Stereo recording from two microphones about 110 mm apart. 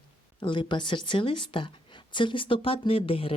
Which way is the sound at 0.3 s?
45° left (ahead or behind).